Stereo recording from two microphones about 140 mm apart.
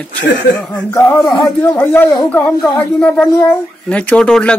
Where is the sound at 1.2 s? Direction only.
Centre (ahead or behind).